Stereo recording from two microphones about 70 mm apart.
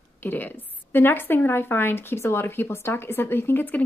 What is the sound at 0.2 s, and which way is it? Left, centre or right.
A woman's voice, left.